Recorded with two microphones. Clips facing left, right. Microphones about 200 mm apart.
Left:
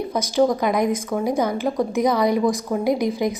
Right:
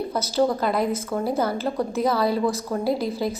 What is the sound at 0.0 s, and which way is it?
A woman's voice, 15° left (ahead or behind).